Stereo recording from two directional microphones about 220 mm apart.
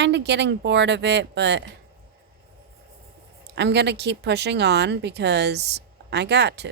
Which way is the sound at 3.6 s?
50° right (ahead or behind).